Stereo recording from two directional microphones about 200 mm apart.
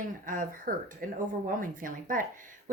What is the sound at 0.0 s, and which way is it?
A woman's voice, 40° right (ahead or behind).